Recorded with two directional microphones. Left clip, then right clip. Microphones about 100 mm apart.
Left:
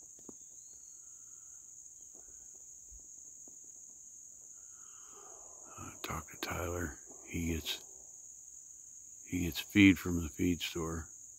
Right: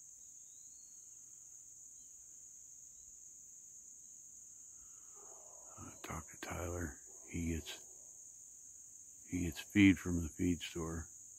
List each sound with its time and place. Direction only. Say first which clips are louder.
5.8 s cricket: left 6 dB; 20° left (ahead or behind)
9.3 s speech: left 4 dB; 15° left (ahead or behind)